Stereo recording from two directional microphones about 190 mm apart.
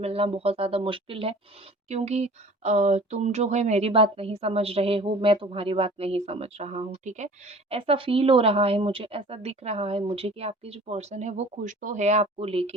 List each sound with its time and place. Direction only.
0.0 s speech: 30° right (ahead or behind)